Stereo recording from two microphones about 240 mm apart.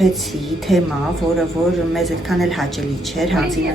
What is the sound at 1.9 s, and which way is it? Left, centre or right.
Speech, centre.